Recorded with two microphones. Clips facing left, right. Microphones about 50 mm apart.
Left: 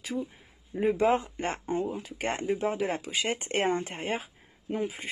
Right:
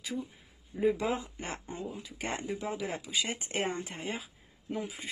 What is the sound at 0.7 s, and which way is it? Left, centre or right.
Speech, left.